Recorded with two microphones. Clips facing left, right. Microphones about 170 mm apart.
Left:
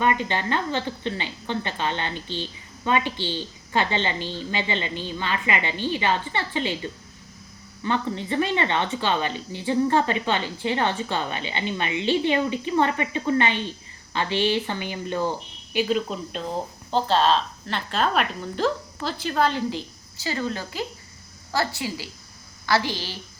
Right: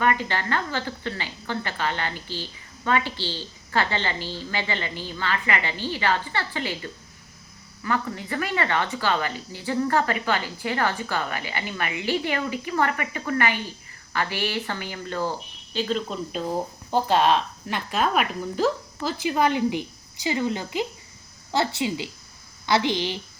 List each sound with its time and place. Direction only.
0.0 s a woman's voice: 20° left (ahead or behind); by 23.2 s 20° right (ahead or behind)